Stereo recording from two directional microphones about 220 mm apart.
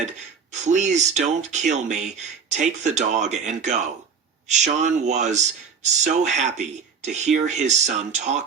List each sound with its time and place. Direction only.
0.5 s speech: 30° right (ahead or behind)